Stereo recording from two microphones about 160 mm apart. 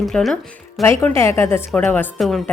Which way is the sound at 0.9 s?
15° left (ahead or behind).